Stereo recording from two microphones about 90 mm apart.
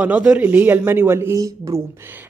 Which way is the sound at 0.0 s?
15° right (ahead or behind).